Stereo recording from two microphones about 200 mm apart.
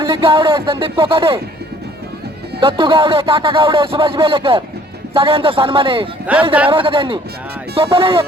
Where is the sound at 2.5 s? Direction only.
25° right (ahead or behind).